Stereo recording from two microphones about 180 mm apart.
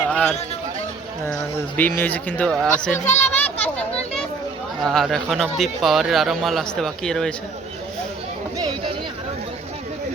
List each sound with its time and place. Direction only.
0.1 s a sound: 5° left (ahead or behind)
1.3 s speech: 10° left (ahead or behind)
2.9 s speech: 40° left (ahead or behind)
3.3 s children playing: 10° left (ahead or behind)
4.8 s speech: centre (ahead or behind)
8.5 s a sound: 20° right (ahead or behind)